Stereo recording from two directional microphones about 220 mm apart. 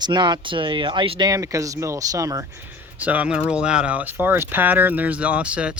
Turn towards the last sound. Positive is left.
turn(degrees=-5)  # may be behind; listen again after turning